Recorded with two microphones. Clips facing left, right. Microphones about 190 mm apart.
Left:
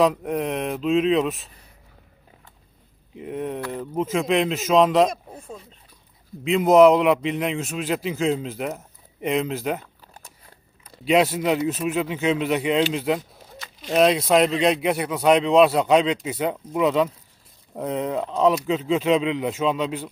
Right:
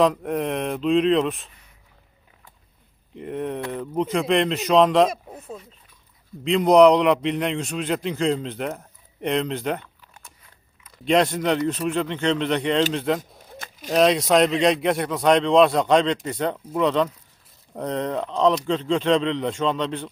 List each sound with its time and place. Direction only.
0.0 s speech: centre (ahead or behind)
3.2 s speech: centre (ahead or behind)
9.8 s biting: 35° left (ahead or behind)
11.0 s speech: 5° left (ahead or behind)